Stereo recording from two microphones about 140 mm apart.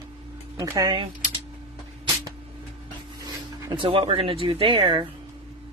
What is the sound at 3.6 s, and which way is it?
Speech, 35° right (ahead or behind).